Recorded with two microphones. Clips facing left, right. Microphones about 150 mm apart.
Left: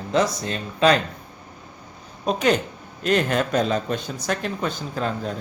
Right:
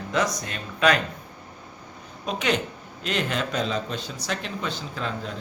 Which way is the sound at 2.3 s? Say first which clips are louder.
Left 5 dB; 40° left (ahead or behind).